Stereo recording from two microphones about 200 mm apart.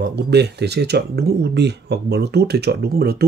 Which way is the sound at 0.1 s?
55° right (ahead or behind).